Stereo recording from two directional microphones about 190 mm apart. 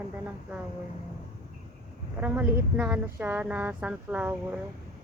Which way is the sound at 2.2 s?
10° right (ahead or behind).